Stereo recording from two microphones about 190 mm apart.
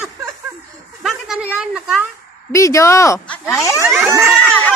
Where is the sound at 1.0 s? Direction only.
5° right (ahead or behind).